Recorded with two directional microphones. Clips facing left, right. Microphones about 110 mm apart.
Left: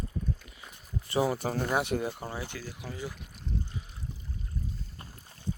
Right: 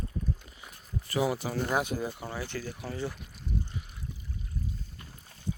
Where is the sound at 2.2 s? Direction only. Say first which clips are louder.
Even; 25° left (ahead or behind).